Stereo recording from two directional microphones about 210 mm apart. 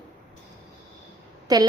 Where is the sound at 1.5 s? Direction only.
20° right (ahead or behind).